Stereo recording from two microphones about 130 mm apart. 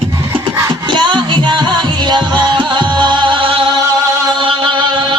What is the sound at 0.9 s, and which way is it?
Music, 35° right (ahead or behind).